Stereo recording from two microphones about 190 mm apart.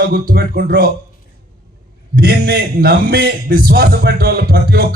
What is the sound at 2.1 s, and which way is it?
A man's voice, 55° right (ahead or behind).